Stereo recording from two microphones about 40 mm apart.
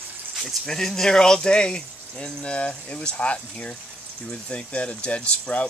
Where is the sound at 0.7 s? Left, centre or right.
Centre.